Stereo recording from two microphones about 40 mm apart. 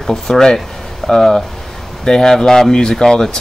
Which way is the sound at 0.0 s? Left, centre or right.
Centre.